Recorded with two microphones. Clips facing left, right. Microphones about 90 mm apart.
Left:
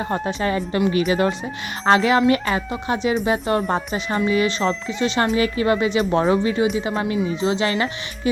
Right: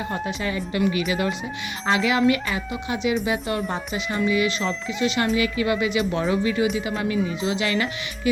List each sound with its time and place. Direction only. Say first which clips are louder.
0.1 s speech: left 5 dB; 40° left (ahead or behind)